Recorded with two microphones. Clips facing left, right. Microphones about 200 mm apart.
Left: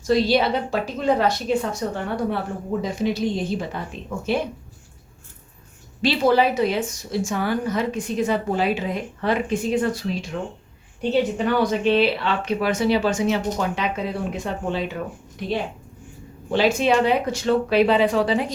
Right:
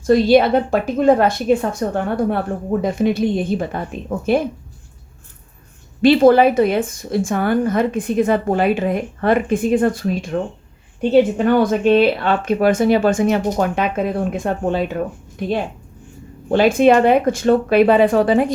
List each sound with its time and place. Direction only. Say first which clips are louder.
0.1 s speech: right 7 dB; 50° right (ahead or behind)
6.0 s speech: right 8 dB; 50° right (ahead or behind)